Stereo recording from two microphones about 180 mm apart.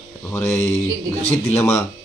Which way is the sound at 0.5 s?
35° left (ahead or behind).